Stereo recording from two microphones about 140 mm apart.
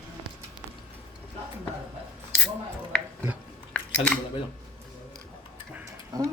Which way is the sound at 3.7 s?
10° left (ahead or behind).